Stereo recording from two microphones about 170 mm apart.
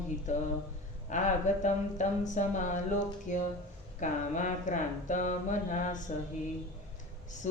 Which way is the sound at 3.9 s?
45° left (ahead or behind).